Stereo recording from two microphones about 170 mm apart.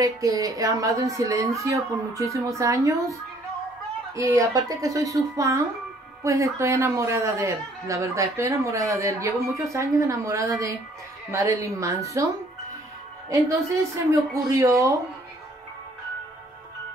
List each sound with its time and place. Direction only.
0.0 s a woman's voice: 20° right (ahead or behind)
13.9 s a man's voice: 20° right (ahead or behind)